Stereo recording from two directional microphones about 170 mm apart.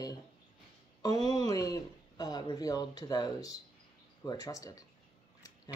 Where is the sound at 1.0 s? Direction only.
25° left (ahead or behind).